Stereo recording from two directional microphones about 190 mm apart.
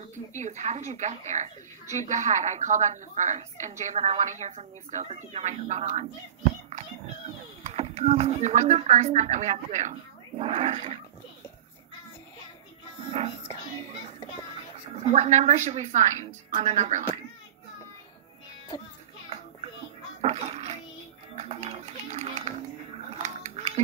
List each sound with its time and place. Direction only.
0.4 s a woman's voice: 35° right (ahead or behind)
7.6 s a woman's voice: 35° right (ahead or behind)
15.0 s a woman's voice: 35° right (ahead or behind)
20.2 s a sound: 35° right (ahead or behind)
21.4 s music: 35° right (ahead or behind)
23.1 s a sound: 40° right (ahead or behind)